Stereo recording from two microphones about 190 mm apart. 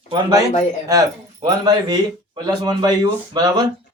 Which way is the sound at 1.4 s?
20° right (ahead or behind).